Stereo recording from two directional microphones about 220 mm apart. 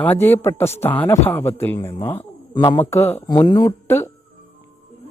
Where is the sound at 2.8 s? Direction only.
10° left (ahead or behind).